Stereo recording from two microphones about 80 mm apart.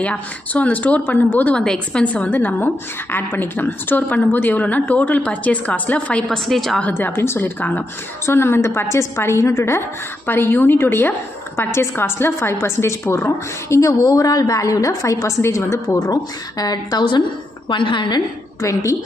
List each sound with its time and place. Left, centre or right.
0.0 s a woman's voice: centre
6.8 s a woman's voice: left
16.0 s speech: left
17.6 s a woman's voice: left
18.6 s a woman's voice: left